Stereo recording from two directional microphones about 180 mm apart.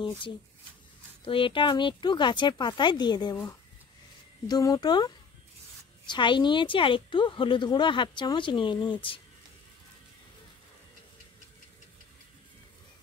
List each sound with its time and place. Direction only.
1.2 s a woman's voice: 30° left (ahead or behind)
4.5 s a woman's voice: 20° left (ahead or behind)